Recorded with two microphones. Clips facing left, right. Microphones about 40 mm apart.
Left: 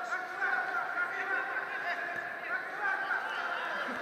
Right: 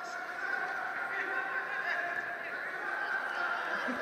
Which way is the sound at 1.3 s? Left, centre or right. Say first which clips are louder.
Left 1 dB; centre.